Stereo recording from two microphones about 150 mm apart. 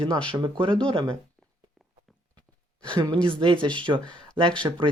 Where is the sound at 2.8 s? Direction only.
30° right (ahead or behind).